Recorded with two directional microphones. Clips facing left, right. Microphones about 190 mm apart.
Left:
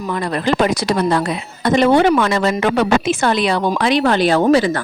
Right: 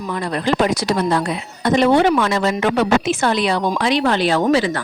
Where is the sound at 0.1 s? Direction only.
65° left (ahead or behind).